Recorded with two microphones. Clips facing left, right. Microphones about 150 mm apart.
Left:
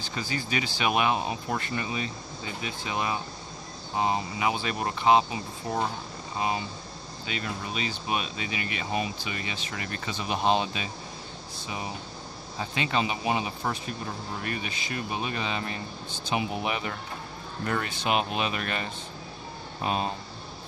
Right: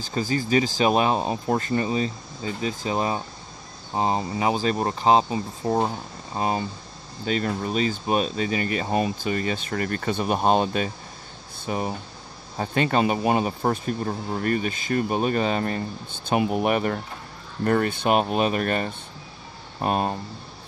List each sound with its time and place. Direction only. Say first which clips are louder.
0.1 s speech: right 9 dB; 40° right (ahead or behind)